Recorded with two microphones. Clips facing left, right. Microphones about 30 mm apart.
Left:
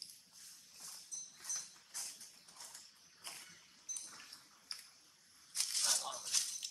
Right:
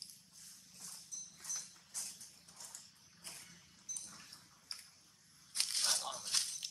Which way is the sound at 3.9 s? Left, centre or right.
Centre.